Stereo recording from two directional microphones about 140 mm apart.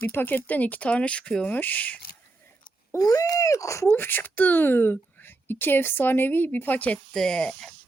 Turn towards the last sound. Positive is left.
turn(degrees=5)  # may be behind; listen again after turning